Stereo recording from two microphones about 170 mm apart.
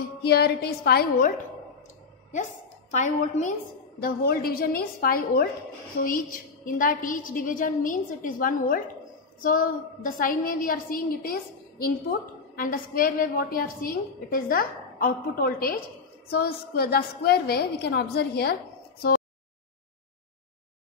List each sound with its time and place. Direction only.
0.2 s a woman's voice: 70° left (ahead or behind)
2.9 s a woman's voice: 45° left (ahead or behind)
4.0 s a woman's voice: 60° left (ahead or behind)
12.5 s a woman's voice: 55° left (ahead or behind)